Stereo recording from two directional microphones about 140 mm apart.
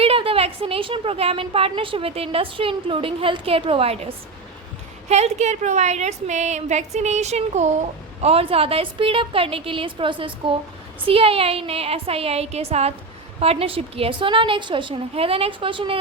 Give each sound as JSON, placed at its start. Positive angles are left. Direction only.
{"t": 0.0, "sound": "a woman's voice", "side_deg": -45}